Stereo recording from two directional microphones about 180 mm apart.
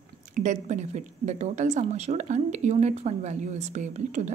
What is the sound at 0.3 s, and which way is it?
Speech, 40° right (ahead or behind).